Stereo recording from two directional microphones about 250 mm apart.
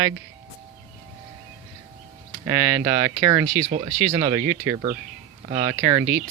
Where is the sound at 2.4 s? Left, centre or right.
Centre.